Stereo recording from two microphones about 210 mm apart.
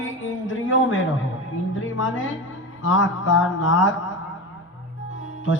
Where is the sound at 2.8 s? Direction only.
75° left (ahead or behind).